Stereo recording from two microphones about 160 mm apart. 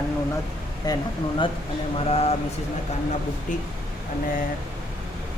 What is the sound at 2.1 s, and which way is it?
Speech, 40° left (ahead or behind).